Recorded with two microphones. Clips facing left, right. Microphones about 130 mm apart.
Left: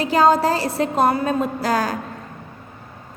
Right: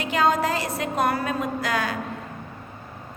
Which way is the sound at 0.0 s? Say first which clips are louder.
Left 6 dB; 35° left (ahead or behind).